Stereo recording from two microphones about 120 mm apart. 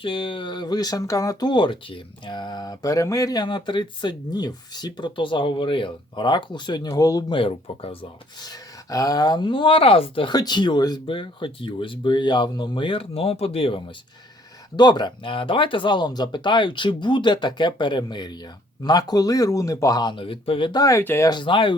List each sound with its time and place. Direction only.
0.0 s speech: 45° left (ahead or behind)
8.4 s speech: 35° left (ahead or behind); by 10.3 s 50° left (ahead or behind)
10.3 s speech: 35° left (ahead or behind)
11.0 s speech: 45° left (ahead or behind)
14.8 s speech: 35° left (ahead or behind)
21.0 s speech: 20° left (ahead or behind)
21.2 s speech: 40° left (ahead or behind)